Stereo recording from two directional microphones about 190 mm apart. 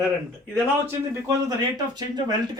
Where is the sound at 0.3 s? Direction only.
10° right (ahead or behind).